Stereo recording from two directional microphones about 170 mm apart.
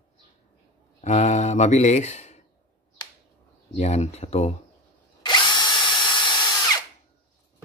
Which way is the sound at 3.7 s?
40° left (ahead or behind).